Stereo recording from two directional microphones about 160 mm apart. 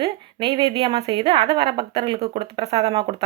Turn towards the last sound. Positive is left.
turn(degrees=-35)  # may be behind; listen again after turning